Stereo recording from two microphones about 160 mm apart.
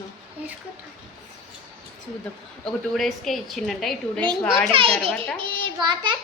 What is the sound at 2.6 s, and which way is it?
Speech, centre (ahead or behind).